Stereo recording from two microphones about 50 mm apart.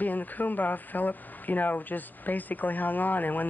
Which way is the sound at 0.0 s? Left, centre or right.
Left.